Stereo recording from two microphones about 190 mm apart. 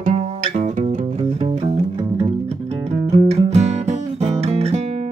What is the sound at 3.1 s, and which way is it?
Music, 35° right (ahead or behind).